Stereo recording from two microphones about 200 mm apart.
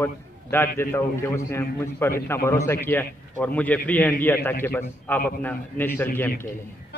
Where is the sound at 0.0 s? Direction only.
10° left (ahead or behind).